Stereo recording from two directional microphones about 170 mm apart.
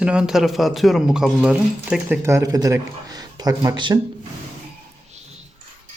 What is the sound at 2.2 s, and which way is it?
Speech, 20° right (ahead or behind).